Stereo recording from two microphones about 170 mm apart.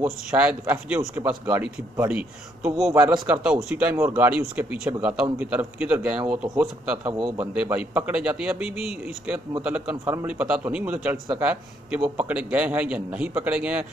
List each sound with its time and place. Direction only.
0.3 s speech: 10° right (ahead or behind)
7.1 s a man's voice: 25° right (ahead or behind)
7.3 s speech: 10° right (ahead or behind)